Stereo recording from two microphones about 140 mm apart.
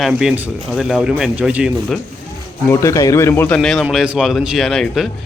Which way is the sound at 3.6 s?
Centre (ahead or behind).